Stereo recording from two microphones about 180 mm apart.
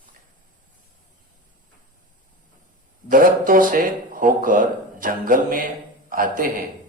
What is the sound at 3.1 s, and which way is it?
A man's voice, 50° right (ahead or behind).